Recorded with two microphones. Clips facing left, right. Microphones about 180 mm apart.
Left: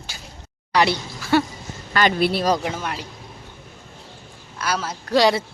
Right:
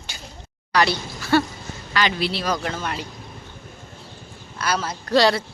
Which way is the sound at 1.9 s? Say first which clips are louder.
Left 4 dB; 50° left (ahead or behind).